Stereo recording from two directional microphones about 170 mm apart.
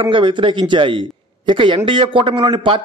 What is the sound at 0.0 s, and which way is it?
A man's voice, 30° right (ahead or behind).